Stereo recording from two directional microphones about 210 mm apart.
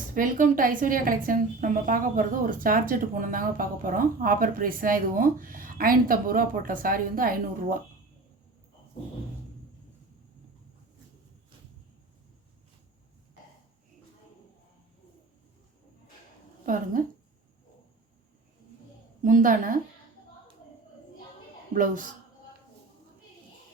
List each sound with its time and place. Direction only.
0.1 s a woman's voice: 40° right (ahead or behind)
16.6 s a woman's voice: 40° right (ahead or behind)
19.2 s a woman's voice: 40° right (ahead or behind)
21.7 s a woman's voice: 40° right (ahead or behind)